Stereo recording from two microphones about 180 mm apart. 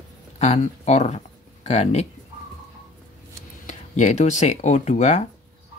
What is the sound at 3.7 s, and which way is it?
Speech, 40° left (ahead or behind).